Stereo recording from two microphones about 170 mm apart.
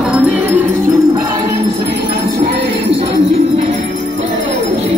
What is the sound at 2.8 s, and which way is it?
Music, 35° right (ahead or behind).